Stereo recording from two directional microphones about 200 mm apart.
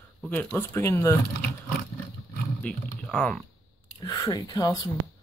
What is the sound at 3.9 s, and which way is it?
Speech, 15° left (ahead or behind).